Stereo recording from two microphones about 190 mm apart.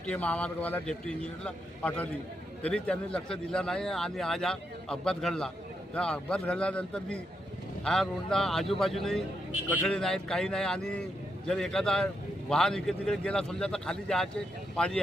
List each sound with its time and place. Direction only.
0.0 s a man's voice: 5° left (ahead or behind)